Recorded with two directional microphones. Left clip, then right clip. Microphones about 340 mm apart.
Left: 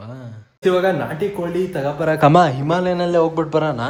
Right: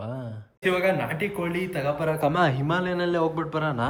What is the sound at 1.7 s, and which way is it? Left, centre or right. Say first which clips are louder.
Speech: left 5 dB; centre.